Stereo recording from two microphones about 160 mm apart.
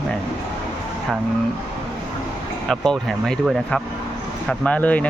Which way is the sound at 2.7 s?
Centre (ahead or behind).